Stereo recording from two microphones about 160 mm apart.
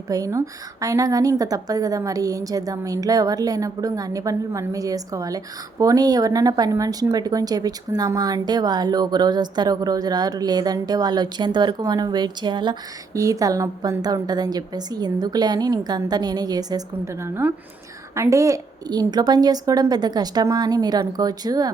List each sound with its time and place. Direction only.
0.1 s speech: 20° right (ahead or behind)